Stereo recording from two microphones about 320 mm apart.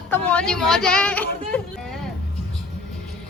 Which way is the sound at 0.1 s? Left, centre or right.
Centre.